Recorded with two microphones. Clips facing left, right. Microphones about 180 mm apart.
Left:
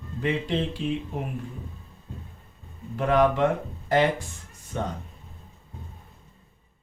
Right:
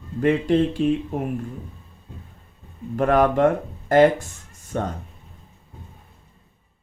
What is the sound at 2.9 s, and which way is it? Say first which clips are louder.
Speech: right 3 dB; 50° right (ahead or behind).